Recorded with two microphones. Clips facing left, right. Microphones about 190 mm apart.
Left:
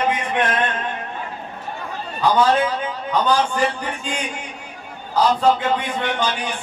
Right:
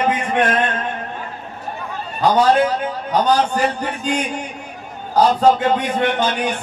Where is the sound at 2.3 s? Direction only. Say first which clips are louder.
Right 3 dB; 40° right (ahead or behind).